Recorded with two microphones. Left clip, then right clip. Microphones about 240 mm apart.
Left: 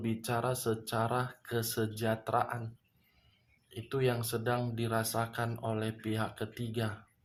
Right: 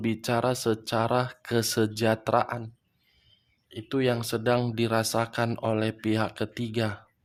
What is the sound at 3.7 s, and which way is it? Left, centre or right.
Speech, right.